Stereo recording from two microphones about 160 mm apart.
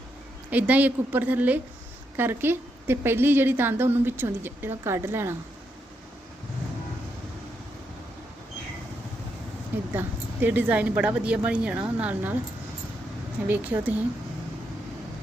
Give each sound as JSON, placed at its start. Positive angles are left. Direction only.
{"t": 0.5, "sound": "a woman's voice", "side_deg": -10}
{"t": 9.9, "sound": "a woman's voice", "side_deg": -10}
{"t": 13.5, "sound": "a woman's voice", "side_deg": -10}